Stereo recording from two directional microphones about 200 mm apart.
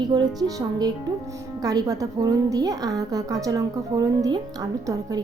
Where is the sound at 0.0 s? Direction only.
20° right (ahead or behind).